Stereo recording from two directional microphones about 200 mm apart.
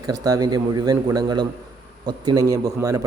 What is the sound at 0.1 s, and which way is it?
A man's voice, 20° right (ahead or behind).